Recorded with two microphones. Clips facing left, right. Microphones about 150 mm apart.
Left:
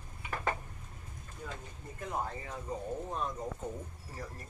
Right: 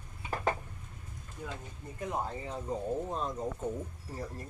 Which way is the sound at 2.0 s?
15° right (ahead or behind).